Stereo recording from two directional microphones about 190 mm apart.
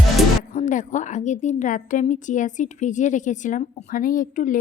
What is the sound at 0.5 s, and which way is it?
A woman's voice, 40° left (ahead or behind).